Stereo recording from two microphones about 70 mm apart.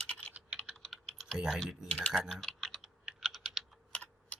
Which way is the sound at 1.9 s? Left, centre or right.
Centre.